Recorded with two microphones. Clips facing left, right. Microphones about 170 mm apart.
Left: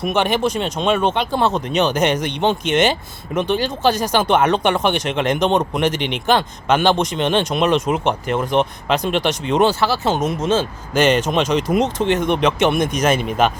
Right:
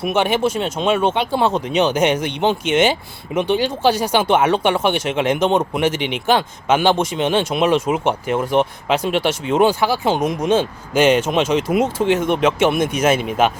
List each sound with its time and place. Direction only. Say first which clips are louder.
0.0 s speech: right 1 dB; 10° right (ahead or behind)